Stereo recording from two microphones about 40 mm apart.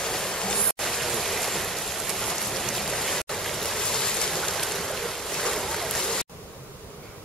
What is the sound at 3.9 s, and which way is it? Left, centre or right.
Waves, centre.